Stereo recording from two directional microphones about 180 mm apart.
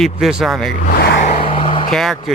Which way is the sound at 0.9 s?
60° left (ahead or behind).